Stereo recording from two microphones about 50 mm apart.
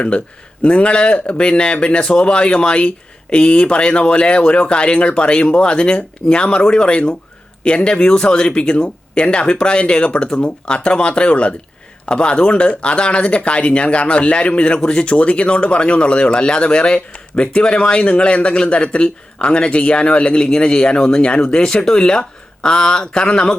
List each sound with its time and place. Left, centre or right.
0.6 s speech: left